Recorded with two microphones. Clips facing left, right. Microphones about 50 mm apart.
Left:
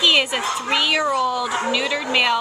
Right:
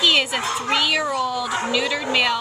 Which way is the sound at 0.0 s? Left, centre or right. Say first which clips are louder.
Left 1 dB; centre.